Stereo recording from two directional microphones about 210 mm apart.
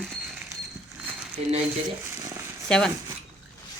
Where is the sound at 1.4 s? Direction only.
30° right (ahead or behind).